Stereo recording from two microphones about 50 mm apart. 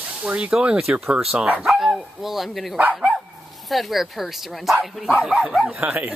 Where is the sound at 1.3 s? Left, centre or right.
Right.